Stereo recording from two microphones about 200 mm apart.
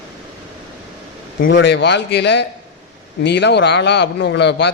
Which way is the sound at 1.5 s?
60° left (ahead or behind).